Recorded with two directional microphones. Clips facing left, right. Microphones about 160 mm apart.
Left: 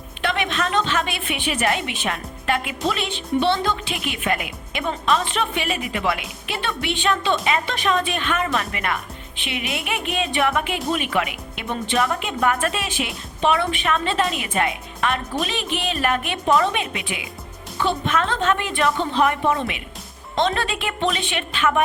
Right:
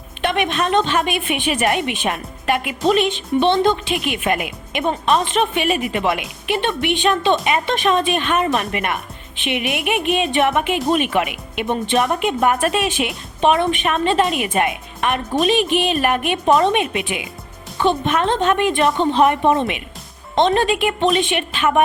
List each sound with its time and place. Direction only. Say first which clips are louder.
0.2 s a woman's voice: right 4 dB; 20° right (ahead or behind)